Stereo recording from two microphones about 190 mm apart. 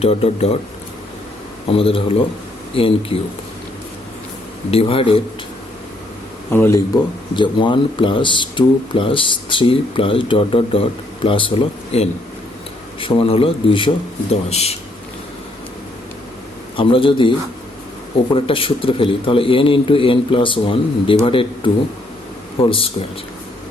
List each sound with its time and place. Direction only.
0.0 s speech: 30° left (ahead or behind)
1.7 s speech: 30° left (ahead or behind)
4.7 s speech: 30° left (ahead or behind)
6.5 s speech: 15° left (ahead or behind); by 14.8 s 35° left (ahead or behind)
16.7 s speech: 25° left (ahead or behind)
18.3 s speech: 30° left (ahead or behind)
22.7 s speech: 30° left (ahead or behind)